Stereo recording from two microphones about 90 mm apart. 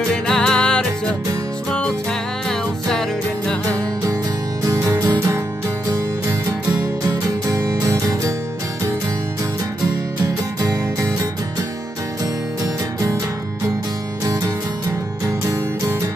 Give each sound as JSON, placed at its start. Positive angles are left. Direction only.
{"t": 0.1, "sound": "music", "side_deg": 10}
{"t": 4.6, "sound": "music", "side_deg": -40}
{"t": 7.1, "sound": "music", "side_deg": -40}
{"t": 10.2, "sound": "music", "side_deg": -35}